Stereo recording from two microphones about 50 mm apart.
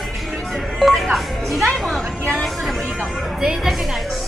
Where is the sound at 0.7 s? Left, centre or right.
Centre.